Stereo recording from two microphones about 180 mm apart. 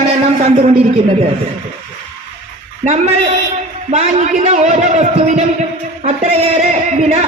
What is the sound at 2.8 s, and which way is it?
A man's voice, 40° right (ahead or behind).